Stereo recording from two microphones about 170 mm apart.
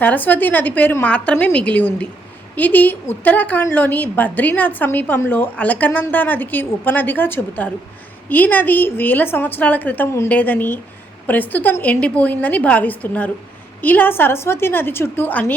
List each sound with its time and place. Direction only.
0.0 s a woman's voice: 10° left (ahead or behind)